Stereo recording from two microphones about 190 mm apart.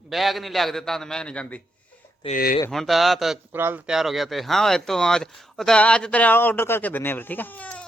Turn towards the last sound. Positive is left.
turn(degrees=10)  # may be behind; listen again after turning